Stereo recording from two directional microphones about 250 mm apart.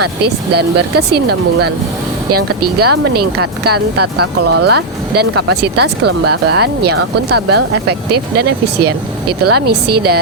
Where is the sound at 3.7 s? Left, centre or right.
Right.